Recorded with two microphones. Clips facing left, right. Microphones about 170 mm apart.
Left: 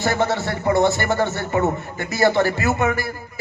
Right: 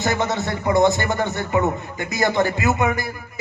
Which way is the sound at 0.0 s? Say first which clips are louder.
Left 1 dB; 20° right (ahead or behind).